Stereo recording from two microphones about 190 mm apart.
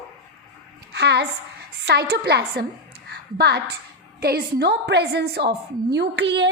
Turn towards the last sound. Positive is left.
turn(degrees=-70)  # may be behind; listen again after turning